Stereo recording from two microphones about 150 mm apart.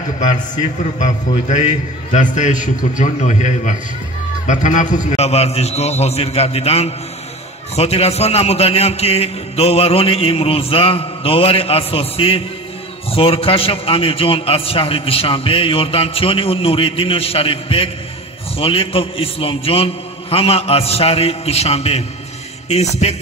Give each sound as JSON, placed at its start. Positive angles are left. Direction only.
{"t": 0.9, "sound": "a man's voice", "side_deg": 55}